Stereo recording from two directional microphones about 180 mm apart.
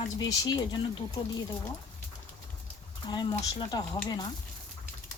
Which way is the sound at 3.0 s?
25° left (ahead or behind).